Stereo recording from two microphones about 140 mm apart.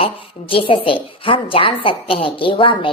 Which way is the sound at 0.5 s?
40° left (ahead or behind).